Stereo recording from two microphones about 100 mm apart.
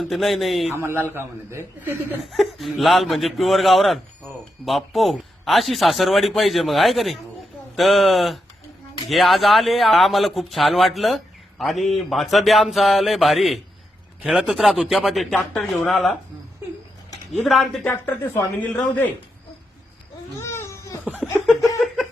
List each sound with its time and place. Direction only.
0.0 s a man's voice: centre (ahead or behind)
0.8 s a man's voice: 25° right (ahead or behind)
2.3 s a man's voice: centre (ahead or behind)
17.3 s a man's voice: centre (ahead or behind)
17.8 s speech: 20° left (ahead or behind)
20.4 s baby cry: 25° left (ahead or behind)
21.0 s a sound: 15° right (ahead or behind)
21.4 s a sound: centre (ahead or behind)